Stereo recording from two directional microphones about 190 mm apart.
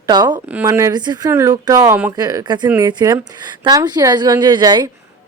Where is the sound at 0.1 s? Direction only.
20° right (ahead or behind).